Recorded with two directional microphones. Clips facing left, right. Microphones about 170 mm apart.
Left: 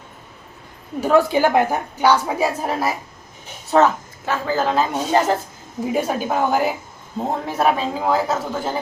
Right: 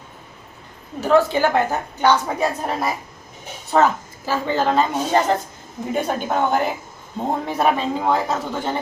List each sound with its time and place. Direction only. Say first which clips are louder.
1.0 s a woman's voice: left 1 dB; 10° left (ahead or behind)